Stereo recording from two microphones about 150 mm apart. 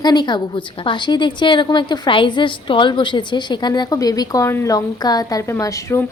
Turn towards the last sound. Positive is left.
turn(degrees=20)  # may be behind; listen again after turning